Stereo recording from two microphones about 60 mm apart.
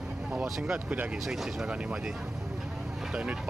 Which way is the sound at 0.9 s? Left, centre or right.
Right.